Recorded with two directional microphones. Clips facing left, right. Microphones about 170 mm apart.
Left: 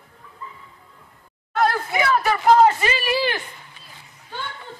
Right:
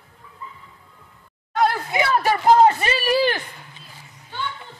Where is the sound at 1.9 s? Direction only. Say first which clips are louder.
Even; 30° right (ahead or behind).